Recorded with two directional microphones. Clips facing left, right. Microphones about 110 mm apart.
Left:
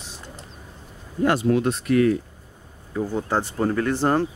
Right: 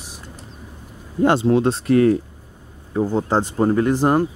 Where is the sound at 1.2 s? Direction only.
25° right (ahead or behind).